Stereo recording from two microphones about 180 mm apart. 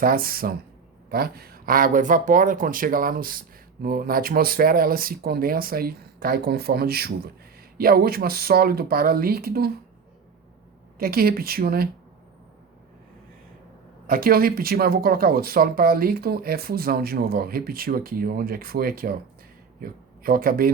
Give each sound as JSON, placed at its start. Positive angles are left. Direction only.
{"t": 0.0, "sound": "speech", "side_deg": -55}
{"t": 11.0, "sound": "speech", "side_deg": -55}
{"t": 14.1, "sound": "speech", "side_deg": -55}